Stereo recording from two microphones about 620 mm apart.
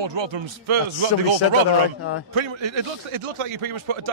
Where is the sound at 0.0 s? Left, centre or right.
Right.